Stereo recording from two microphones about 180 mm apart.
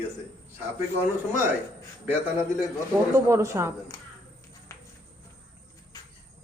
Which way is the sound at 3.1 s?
15° right (ahead or behind).